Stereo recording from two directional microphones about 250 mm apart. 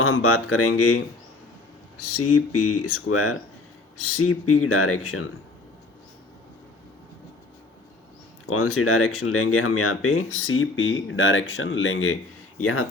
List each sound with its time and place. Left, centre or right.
0.0 s speech: left
2.1 s speech: left
8.4 s speech: left